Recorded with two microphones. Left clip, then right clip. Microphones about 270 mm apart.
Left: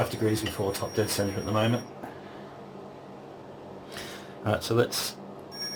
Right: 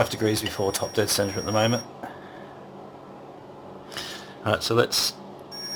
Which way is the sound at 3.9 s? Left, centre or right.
Right.